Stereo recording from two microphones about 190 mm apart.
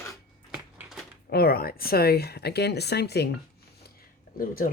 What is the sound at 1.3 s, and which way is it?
Speech, 55° left (ahead or behind).